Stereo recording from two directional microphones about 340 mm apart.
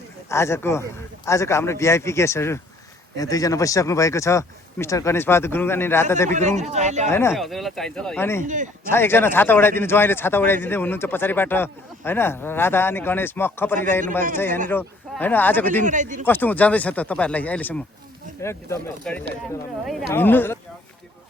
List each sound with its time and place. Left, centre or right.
0.3 s speech: centre
6.3 s speech: centre
7.1 s speech: centre
8.4 s speech: right
8.9 s speech: centre
15.8 s speech: right
16.2 s speech: centre